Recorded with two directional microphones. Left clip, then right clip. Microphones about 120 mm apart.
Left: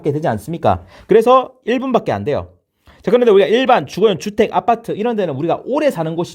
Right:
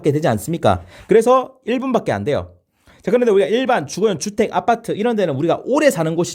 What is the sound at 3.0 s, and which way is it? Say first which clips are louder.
Speech: left 4 dB; 35° left (ahead or behind).